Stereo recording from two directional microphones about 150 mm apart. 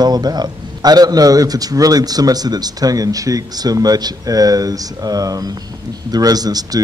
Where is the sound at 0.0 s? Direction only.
25° right (ahead or behind).